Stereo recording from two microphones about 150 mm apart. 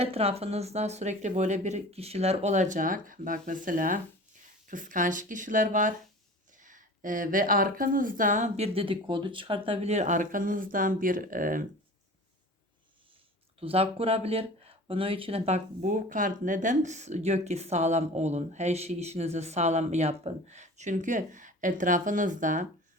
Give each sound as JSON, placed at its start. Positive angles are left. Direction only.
{"t": 0.0, "sound": "speech", "side_deg": -40}
{"t": 13.6, "sound": "speech", "side_deg": -40}